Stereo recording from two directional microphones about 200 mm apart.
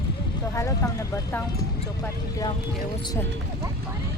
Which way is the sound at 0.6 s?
15° left (ahead or behind).